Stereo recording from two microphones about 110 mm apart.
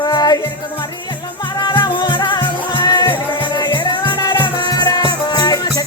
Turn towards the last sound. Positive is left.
turn(degrees=35)  # may be behind; listen again after turning